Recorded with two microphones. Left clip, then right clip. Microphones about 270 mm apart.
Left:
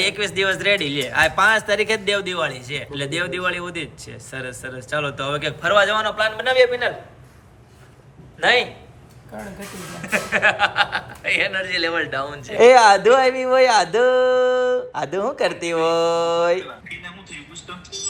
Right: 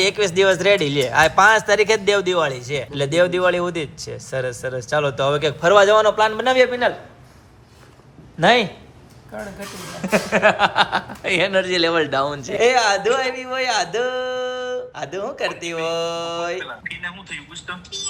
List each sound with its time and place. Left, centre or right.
0.0 s a man's voice: centre
8.4 s a man's voice: right
9.3 s speech: centre
10.0 s speech: centre
12.5 s speech: centre